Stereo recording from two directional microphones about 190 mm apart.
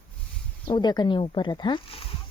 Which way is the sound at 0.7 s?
20° left (ahead or behind).